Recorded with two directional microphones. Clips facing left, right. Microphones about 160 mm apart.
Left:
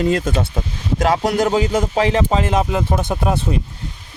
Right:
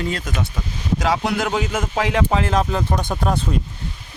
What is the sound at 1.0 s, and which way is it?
Speech, 45° left (ahead or behind).